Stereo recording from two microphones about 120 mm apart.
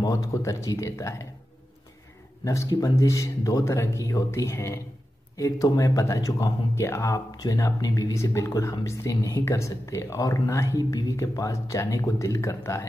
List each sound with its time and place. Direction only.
0.0 s speech: 30° left (ahead or behind)
2.4 s speech: 25° left (ahead or behind)
5.8 s speech: 30° left (ahead or behind)